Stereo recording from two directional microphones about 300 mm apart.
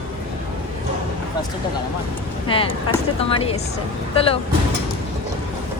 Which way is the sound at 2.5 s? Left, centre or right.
Centre.